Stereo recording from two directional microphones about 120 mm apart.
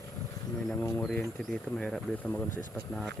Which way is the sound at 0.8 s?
20° left (ahead or behind).